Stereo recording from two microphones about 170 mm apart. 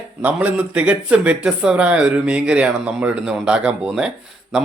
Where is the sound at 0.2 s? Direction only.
10° right (ahead or behind).